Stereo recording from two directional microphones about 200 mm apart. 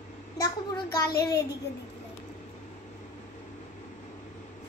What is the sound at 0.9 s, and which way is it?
Speech, 20° left (ahead or behind).